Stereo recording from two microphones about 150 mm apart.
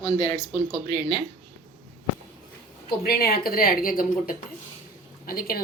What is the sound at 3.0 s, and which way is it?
Speech, 90° left.